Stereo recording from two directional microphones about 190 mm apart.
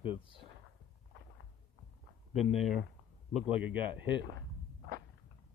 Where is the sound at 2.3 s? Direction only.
Centre (ahead or behind).